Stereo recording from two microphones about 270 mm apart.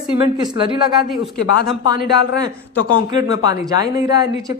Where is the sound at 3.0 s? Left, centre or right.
Centre.